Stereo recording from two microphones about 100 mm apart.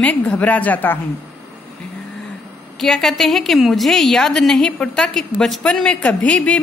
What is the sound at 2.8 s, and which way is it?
A woman's voice, 5° left (ahead or behind).